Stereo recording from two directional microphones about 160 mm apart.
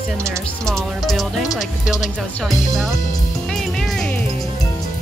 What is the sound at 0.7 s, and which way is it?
Speech, centre (ahead or behind).